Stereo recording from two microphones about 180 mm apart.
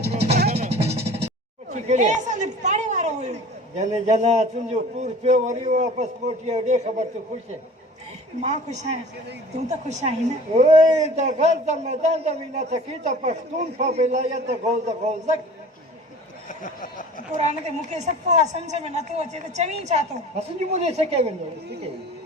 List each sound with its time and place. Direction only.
0.3 s music: 60° right (ahead or behind)
0.5 s music: 35° right (ahead or behind)
1.7 s chatter: 45° right (ahead or behind)
3.8 s a woman's voice: 40° right (ahead or behind)
8.4 s a woman's voice: 40° right (ahead or behind)
16.5 s speech: 50° left (ahead or behind)
17.9 s a woman's voice: 40° right (ahead or behind)